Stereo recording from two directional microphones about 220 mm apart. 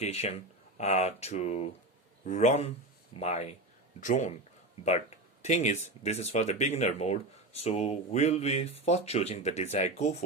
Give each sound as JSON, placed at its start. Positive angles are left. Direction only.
{"t": 0.0, "sound": "speech", "side_deg": 30}